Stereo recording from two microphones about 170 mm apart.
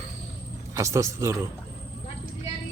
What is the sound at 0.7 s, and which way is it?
Speech, 20° right (ahead or behind).